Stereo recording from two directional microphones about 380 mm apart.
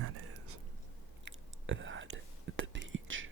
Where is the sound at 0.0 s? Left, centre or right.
Right.